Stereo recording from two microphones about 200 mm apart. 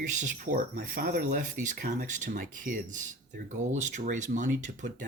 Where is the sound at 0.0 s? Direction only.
40° right (ahead or behind).